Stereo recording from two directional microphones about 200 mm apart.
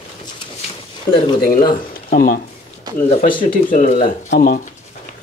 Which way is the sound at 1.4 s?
45° left (ahead or behind).